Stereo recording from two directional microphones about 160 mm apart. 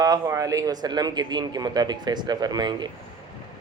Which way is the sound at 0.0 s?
20° right (ahead or behind).